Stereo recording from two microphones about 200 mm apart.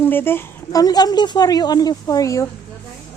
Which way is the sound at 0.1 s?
10° left (ahead or behind).